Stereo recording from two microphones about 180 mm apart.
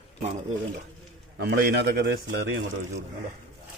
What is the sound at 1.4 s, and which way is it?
Speech, 60° right (ahead or behind).